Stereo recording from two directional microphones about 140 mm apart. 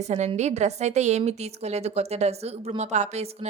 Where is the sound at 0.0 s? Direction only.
55° right (ahead or behind).